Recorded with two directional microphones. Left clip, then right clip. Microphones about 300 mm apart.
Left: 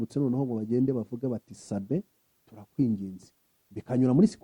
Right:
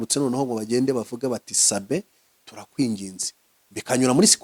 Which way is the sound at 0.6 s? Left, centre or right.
Centre.